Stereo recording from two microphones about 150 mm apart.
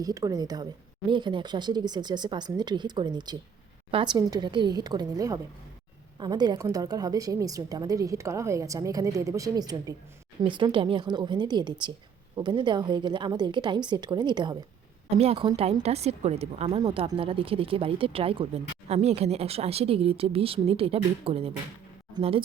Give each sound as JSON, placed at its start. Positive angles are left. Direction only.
{"t": 0.0, "sound": "a woman's voice", "side_deg": -25}
{"t": 15.2, "sound": "speech", "side_deg": -40}